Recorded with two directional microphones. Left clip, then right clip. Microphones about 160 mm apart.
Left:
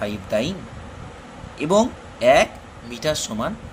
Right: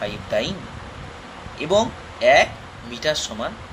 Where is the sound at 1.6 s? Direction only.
65° left (ahead or behind).